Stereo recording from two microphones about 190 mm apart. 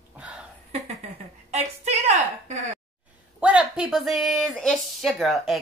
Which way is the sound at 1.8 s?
35° right (ahead or behind).